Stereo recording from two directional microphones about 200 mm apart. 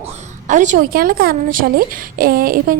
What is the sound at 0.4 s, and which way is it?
A woman's voice, 40° right (ahead or behind).